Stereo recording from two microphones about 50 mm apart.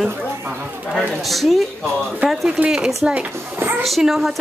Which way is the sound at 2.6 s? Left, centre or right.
Centre.